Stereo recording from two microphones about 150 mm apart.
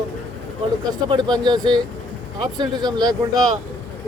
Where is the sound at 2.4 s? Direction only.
25° right (ahead or behind).